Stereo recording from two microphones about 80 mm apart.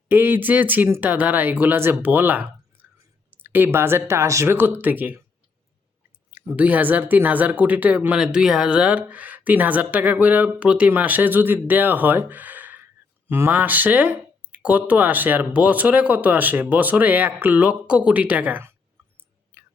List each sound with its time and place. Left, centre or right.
0.1 s speech: right
6.6 s speech: right
19.1 s chewing: right